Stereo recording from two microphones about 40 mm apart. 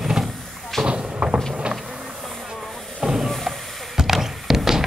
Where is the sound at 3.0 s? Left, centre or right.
Centre.